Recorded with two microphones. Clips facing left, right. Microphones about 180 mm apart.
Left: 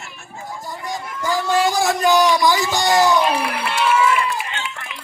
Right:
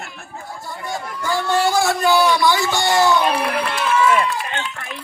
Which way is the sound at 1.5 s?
20° left (ahead or behind).